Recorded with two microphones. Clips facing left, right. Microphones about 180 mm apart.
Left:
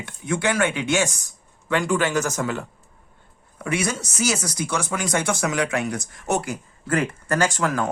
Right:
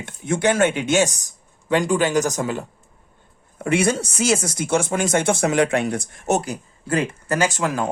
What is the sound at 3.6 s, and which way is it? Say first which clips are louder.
Speech: right 6 dB; 30° right (ahead or behind).